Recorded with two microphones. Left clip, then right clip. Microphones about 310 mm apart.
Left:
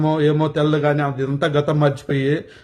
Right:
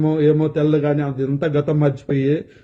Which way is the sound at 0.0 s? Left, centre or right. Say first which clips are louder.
Right 1 dB; centre.